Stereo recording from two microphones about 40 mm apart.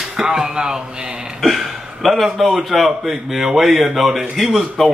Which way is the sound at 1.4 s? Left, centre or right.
Centre.